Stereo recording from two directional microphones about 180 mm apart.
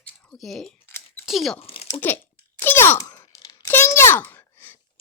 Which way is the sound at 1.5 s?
35° left (ahead or behind).